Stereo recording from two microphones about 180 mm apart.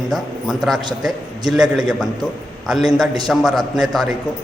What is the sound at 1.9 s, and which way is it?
A man's voice, 5° right (ahead or behind).